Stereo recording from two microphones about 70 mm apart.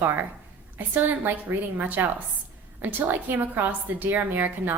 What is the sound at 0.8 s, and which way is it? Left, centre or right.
A woman's voice, right.